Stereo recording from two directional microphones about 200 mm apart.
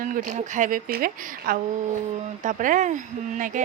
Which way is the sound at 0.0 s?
40° right (ahead or behind).